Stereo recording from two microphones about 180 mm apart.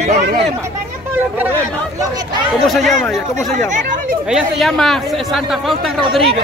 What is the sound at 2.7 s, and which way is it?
Speech, centre (ahead or behind).